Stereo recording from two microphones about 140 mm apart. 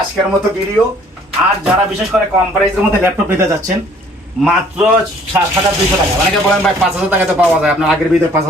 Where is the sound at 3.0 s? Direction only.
20° right (ahead or behind).